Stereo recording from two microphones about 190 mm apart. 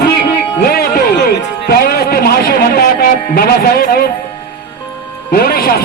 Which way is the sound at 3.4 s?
50° left (ahead or behind).